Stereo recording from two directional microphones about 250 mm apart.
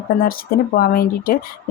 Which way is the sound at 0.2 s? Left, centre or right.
Left.